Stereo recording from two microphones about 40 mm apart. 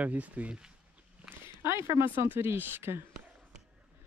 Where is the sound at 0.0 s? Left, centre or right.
Right.